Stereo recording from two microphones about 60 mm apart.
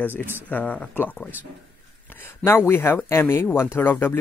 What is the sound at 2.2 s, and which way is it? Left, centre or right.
Speech, left.